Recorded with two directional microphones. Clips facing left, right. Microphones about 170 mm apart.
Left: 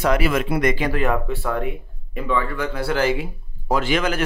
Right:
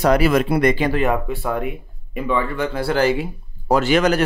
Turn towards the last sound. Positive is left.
turn(degrees=-40)  # may be behind; listen again after turning